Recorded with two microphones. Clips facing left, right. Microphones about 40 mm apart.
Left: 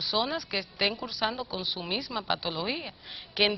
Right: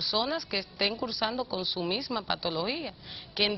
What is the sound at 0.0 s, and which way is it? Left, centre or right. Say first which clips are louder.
Speech: even; centre.